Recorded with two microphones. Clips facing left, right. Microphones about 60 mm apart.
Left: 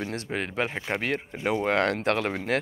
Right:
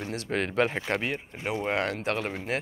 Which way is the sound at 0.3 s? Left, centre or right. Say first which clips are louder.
Right 5 dB; centre.